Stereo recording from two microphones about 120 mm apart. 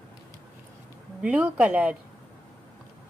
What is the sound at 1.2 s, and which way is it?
Speech, 10° right (ahead or behind).